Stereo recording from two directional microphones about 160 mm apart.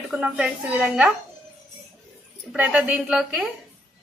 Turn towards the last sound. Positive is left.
turn(degrees=-5)  # may be behind; listen again after turning